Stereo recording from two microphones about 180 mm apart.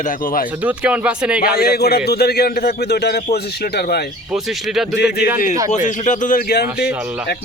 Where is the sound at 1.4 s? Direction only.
60° left (ahead or behind).